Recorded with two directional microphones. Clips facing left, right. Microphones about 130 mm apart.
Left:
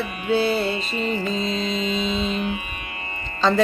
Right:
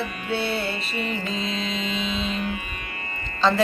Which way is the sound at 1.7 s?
40° left (ahead or behind).